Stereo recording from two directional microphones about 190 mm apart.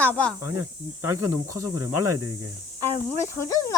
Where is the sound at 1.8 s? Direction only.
15° right (ahead or behind).